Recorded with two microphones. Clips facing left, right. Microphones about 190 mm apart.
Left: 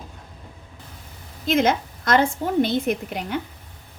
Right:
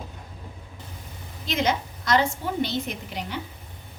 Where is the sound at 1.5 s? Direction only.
50° left (ahead or behind).